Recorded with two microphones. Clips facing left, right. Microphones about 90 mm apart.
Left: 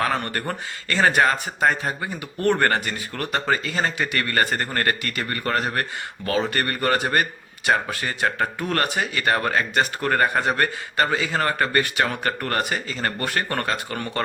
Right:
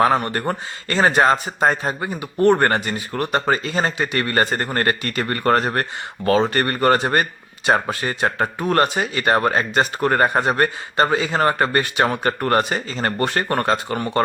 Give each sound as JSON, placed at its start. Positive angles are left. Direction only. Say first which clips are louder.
{"t": 0.2, "sound": "speech", "louder": "right 4 dB", "side_deg": -25}